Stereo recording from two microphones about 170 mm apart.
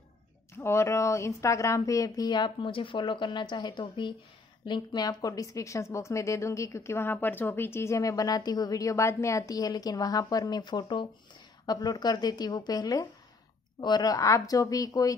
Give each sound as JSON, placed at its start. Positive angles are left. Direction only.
{"t": 0.6, "sound": "a woman's voice", "side_deg": 15}